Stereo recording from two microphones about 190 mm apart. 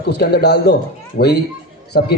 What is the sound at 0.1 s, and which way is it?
A man's voice, 55° left (ahead or behind).